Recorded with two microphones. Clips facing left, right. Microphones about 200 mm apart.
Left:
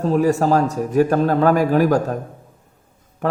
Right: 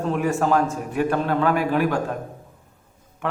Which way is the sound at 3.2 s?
40° left (ahead or behind).